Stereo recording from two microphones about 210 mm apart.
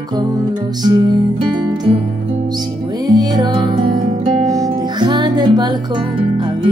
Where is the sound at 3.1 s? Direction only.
20° right (ahead or behind).